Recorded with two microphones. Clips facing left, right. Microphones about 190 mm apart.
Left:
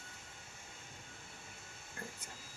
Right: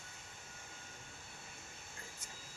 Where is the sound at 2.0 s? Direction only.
60° left (ahead or behind).